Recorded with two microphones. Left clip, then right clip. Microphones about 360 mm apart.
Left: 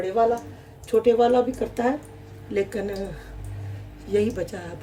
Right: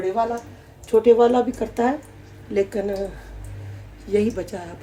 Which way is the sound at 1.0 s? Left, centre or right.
Centre.